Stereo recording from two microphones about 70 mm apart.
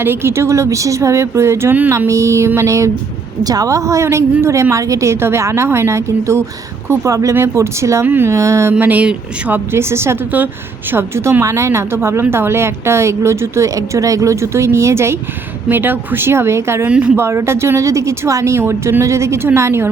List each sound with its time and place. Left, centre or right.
0.0 s speech: right
3.4 s speech: right
8.0 s speech: right
8.3 s speech: right
8.8 s speech: right
9.7 s speech: right
13.7 s speech: right
15.7 s speech: right
16.8 s speech: centre
17.2 s speech: right